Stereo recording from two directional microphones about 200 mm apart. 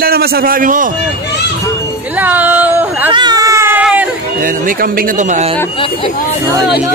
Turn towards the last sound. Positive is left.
turn(degrees=-35)  # may be behind; listen again after turning